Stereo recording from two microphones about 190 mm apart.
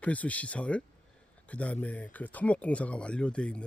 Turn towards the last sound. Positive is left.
turn(degrees=5)  # may be behind; listen again after turning